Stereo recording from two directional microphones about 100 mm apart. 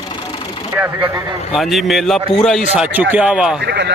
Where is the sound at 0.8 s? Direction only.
20° right (ahead or behind).